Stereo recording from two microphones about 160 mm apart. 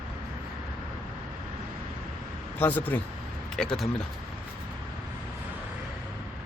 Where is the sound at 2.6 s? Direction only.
10° left (ahead or behind).